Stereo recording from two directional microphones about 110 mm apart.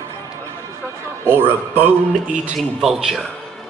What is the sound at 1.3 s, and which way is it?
Speech, 20° right (ahead or behind).